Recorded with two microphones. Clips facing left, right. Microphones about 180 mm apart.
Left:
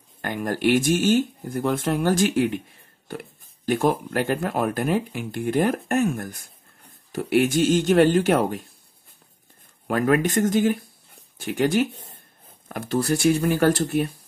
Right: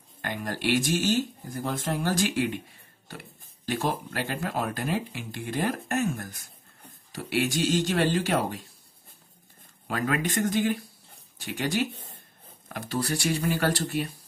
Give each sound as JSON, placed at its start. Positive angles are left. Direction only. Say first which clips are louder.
{"t": 0.2, "sound": "speech", "louder": "left 7 dB", "side_deg": 50}
{"t": 3.6, "sound": "speech", "louder": "left 7 dB", "side_deg": 50}
{"t": 9.8, "sound": "speech", "louder": "left 8 dB", "side_deg": 50}
{"t": 12.6, "sound": "speech", "louder": "left 6 dB", "side_deg": 50}